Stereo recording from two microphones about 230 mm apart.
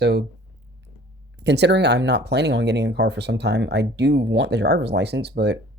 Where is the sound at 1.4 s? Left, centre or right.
Right.